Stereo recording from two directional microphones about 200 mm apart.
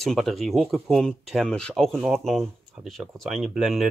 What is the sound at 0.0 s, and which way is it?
Speech, centre (ahead or behind).